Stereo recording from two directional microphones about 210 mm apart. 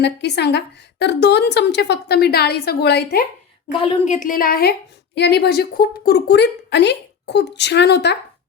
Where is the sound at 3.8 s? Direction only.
30° left (ahead or behind); by 8.2 s 55° left (ahead or behind).